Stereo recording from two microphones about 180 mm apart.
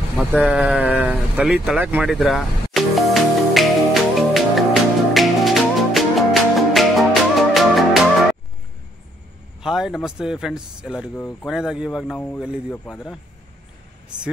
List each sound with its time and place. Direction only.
0.2 s a sound: 10° right (ahead or behind)
5.1 s music: centre (ahead or behind)
9.6 s speech: 5° right (ahead or behind)